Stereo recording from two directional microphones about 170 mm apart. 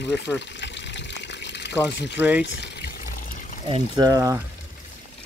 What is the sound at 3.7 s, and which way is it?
Speech, 25° right (ahead or behind).